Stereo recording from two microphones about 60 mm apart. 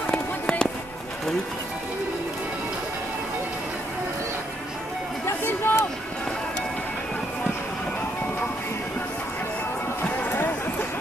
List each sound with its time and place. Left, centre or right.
0.0 s fireworks: centre
5.2 s a sound: left
10.0 s music: left